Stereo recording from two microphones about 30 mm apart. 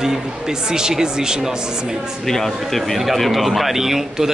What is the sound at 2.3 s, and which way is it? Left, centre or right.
Speech, centre.